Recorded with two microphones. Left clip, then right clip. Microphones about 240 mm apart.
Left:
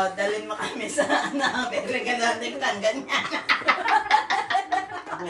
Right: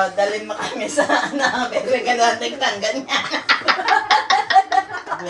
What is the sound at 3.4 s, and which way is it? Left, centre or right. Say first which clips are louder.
Music: right 5 dB; right.